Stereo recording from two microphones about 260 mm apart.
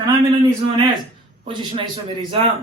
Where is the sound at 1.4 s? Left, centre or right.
Centre.